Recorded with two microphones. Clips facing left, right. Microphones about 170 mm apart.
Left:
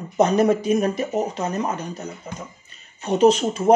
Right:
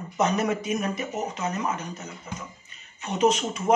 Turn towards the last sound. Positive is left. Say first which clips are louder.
# left 6 dB
turn(degrees=35)  # may be behind; listen again after turning